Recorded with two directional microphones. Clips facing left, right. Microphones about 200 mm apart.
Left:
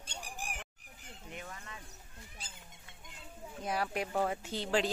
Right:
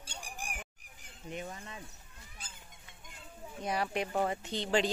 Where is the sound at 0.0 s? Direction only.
10° right (ahead or behind).